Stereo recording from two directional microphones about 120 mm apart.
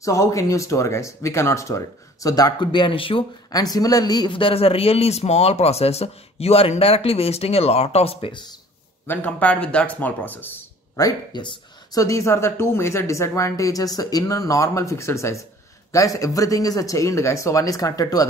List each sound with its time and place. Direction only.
0.0 s speech: 25° left (ahead or behind); by 3.3 s 50° left (ahead or behind)
3.5 s speech: 30° left (ahead or behind)
9.0 s speech: 15° left (ahead or behind)
11.0 s speech: 30° left (ahead or behind)